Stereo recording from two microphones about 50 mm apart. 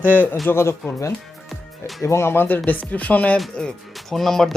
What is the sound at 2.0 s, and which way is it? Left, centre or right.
Speech, left.